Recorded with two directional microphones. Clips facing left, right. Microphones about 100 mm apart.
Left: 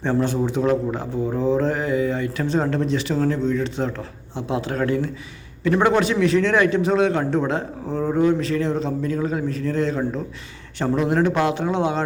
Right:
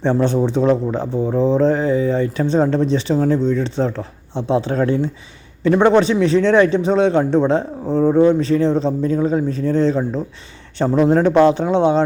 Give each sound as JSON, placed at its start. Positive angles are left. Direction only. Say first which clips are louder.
{"t": 0.0, "sound": "a man's voice", "louder": "right 5 dB", "side_deg": -25}